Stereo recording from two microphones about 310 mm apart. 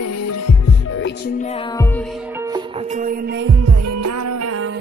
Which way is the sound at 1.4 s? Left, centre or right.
Left.